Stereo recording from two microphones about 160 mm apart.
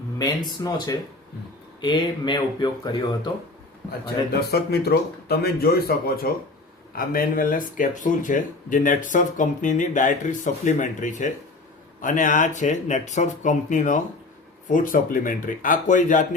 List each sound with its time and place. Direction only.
0.6 s speech: 20° left (ahead or behind)
1.8 s speech: 30° left (ahead or behind)
4.0 s speech: 75° left (ahead or behind); by 16.2 s 55° left (ahead or behind)